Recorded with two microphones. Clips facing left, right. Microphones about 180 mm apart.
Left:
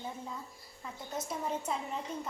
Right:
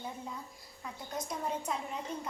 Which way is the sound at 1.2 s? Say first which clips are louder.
Even; 5° left (ahead or behind).